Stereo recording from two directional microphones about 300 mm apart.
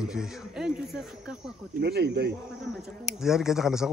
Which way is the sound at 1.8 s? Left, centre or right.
Right.